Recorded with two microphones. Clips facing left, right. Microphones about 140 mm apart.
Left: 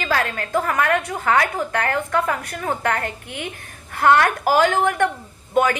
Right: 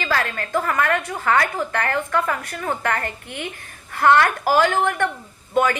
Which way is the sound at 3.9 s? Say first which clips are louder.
Even; 50° left (ahead or behind).